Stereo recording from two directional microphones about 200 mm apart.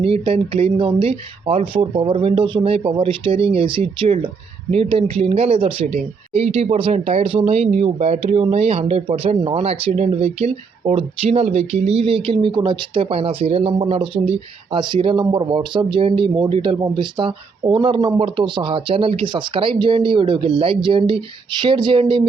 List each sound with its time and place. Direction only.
0.0 s speech: 25° right (ahead or behind)